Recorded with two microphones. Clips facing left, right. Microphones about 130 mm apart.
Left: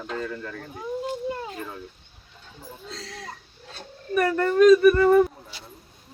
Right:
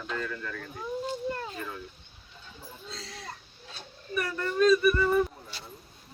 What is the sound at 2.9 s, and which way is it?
Speech, 65° left (ahead or behind).